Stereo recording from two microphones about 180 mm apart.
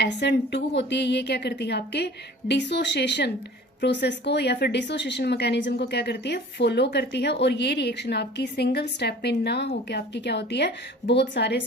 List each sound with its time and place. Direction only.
0.0 s a woman's voice: 70° left (ahead or behind)